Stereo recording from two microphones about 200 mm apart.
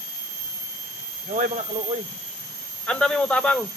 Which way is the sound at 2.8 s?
5° left (ahead or behind).